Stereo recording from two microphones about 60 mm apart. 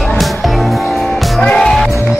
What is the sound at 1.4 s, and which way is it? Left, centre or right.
Music, centre.